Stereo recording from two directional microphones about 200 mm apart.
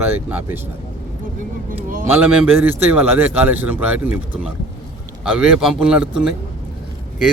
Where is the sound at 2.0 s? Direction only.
10° right (ahead or behind).